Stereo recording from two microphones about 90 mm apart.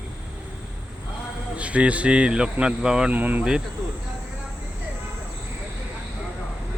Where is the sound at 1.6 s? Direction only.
15° right (ahead or behind).